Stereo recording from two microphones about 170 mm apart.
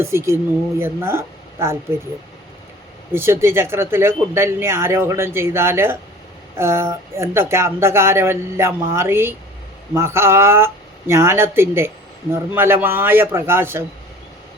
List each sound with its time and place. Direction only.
0.0 s speech: 15° right (ahead or behind)
3.1 s speech: 15° right (ahead or behind)